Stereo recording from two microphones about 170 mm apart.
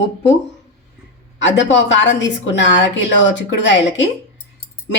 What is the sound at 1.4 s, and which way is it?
A woman's voice, 90° left.